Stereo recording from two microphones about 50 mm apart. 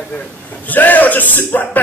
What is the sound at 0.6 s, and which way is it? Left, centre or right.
A woman's voice, left.